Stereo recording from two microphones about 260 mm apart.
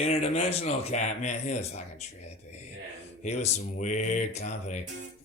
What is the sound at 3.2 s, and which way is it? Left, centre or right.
Speech, left.